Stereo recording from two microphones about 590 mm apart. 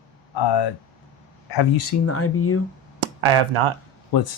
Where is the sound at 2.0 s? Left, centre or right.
Left.